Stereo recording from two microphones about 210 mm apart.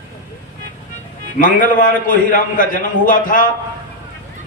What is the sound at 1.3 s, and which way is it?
A man's voice, 40° left (ahead or behind).